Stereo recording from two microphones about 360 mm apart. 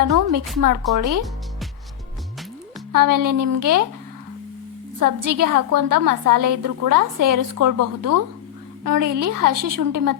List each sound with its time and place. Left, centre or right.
0.0 s a woman's voice: right
2.9 s a woman's voice: right
4.9 s a woman's voice: right